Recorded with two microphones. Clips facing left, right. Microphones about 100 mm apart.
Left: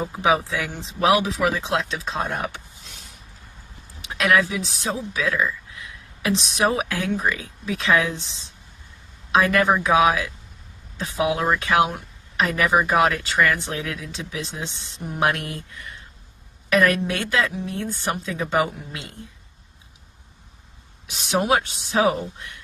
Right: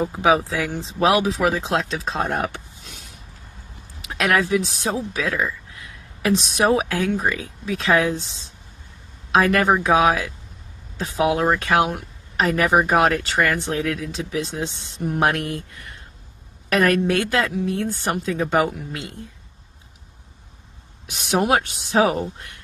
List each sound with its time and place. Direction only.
0.2 s speech: 35° right (ahead or behind)
4.2 s speech: 45° right (ahead or behind)
21.1 s speech: 50° right (ahead or behind)